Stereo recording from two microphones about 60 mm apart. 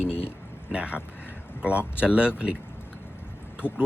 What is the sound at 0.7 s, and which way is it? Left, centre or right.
Speech, right.